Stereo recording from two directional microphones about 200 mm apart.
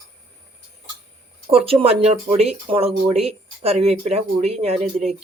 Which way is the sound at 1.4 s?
30° right (ahead or behind).